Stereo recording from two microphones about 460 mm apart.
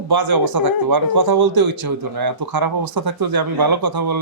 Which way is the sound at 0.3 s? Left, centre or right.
Right.